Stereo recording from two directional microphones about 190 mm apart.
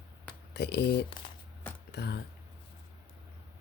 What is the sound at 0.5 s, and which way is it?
Speech, 60° left (ahead or behind).